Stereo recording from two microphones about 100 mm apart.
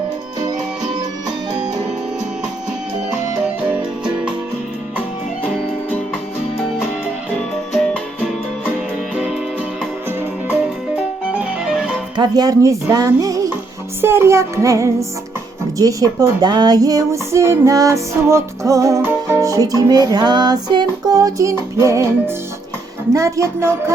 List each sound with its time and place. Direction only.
10.5 s music: 10° right (ahead or behind)
12.1 s speech: 45° right (ahead or behind)
14.0 s music: 25° right (ahead or behind)
15.8 s speech: 35° right (ahead or behind)
19.0 s music: 30° right (ahead or behind)
23.1 s music: 30° right (ahead or behind)